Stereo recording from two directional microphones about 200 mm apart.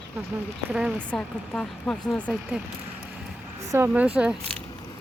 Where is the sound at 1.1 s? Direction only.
5° left (ahead or behind).